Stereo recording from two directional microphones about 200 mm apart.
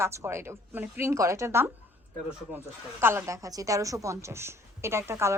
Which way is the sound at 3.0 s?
10° right (ahead or behind).